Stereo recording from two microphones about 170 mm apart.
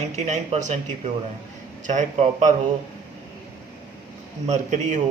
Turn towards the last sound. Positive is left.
turn(degrees=-45)  # may be behind; listen again after turning